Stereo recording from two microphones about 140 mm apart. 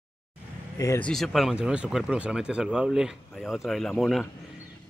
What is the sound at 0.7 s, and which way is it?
Speech, 20° left (ahead or behind).